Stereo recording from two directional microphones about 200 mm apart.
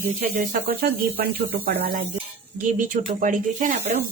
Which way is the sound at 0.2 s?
45° right (ahead or behind).